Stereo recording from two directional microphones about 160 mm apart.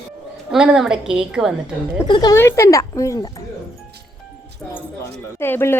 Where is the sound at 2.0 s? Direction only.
30° left (ahead or behind).